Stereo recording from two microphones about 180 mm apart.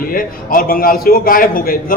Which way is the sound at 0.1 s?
50° left (ahead or behind).